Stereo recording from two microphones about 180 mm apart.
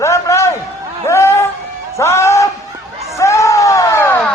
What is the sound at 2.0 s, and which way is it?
Music, 15° left (ahead or behind).